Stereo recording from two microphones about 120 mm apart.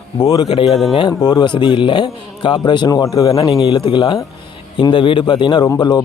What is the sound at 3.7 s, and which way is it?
A man's voice, 45° left (ahead or behind).